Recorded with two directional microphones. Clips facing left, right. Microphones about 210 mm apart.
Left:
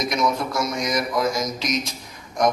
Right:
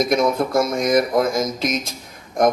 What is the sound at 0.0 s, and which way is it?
A man's voice, 50° right (ahead or behind).